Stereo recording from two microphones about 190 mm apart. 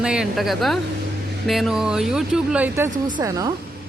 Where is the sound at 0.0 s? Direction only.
5° right (ahead or behind).